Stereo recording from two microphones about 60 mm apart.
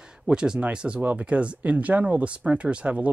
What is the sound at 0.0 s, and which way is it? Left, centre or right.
Speech, centre.